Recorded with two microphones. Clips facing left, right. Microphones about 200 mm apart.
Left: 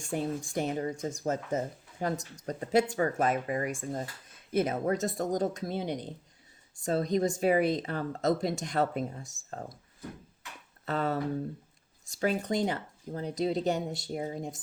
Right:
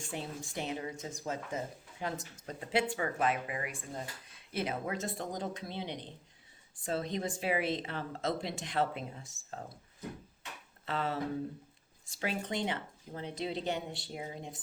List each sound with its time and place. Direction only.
0.0 s speech: 45° left (ahead or behind)
10.8 s speech: 45° left (ahead or behind)